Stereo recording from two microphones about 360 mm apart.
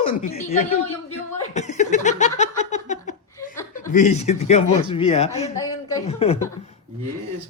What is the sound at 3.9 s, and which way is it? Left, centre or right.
A man's voice, centre.